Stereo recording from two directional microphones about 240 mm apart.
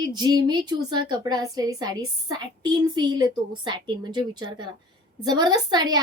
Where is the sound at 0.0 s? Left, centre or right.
Centre.